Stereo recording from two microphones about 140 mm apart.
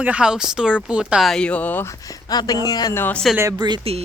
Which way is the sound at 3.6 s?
30° right (ahead or behind).